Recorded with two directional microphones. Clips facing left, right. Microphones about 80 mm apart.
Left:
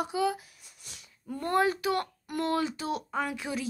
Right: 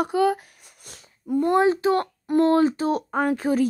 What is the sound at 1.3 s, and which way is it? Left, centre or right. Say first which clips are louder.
Speech: right 8 dB; centre.